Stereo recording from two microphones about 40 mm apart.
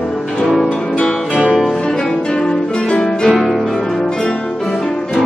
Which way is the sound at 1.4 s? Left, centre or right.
Centre.